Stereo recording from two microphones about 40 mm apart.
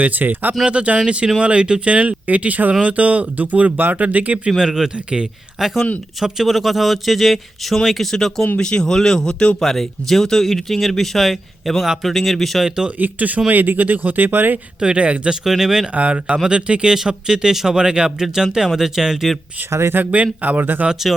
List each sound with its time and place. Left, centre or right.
0.0 s speech: right
0.6 s speech: right
4.5 s a man's voice: centre
12.6 s speech: centre
13.0 s speech: right
14.8 s speech: right
15.3 s speech: centre
16.0 s speech: right; by 19.3 s centre
19.9 s speech: right
20.4 s speech: right